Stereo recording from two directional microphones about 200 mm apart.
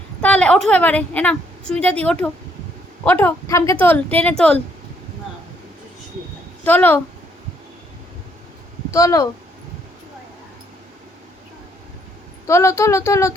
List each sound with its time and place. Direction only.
0.2 s a woman's voice: 5° left (ahead or behind)
6.7 s speech: 10° left (ahead or behind)
8.9 s speech: 15° left (ahead or behind)
12.5 s speech: 15° left (ahead or behind)